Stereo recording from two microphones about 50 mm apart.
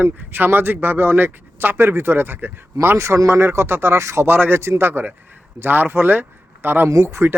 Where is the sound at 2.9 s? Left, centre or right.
Right.